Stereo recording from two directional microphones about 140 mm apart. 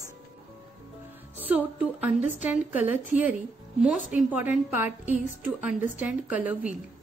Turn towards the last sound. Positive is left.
turn(degrees=-10)  # may be behind; listen again after turning